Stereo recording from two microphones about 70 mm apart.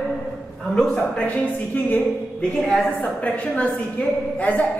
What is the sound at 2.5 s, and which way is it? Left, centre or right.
A man's voice, centre.